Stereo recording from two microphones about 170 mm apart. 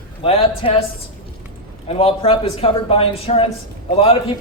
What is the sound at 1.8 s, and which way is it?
Speech, 35° left (ahead or behind).